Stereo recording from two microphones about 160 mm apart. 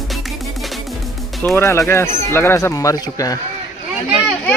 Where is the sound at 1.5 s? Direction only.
15° left (ahead or behind).